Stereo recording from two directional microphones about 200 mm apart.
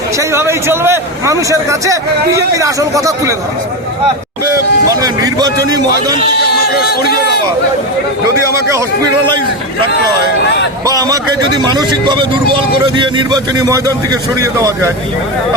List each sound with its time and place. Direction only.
0.2 s a man's voice: 15° right (ahead or behind)
4.9 s a man's voice: 20° right (ahead or behind)
6.7 s speech: 50° left (ahead or behind)
8.4 s a man's voice: 15° right (ahead or behind)
10.4 s speech: 55° left (ahead or behind)
10.8 s a man's voice: 20° right (ahead or behind)